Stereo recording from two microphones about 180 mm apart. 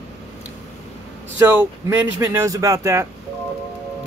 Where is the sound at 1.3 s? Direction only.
10° right (ahead or behind).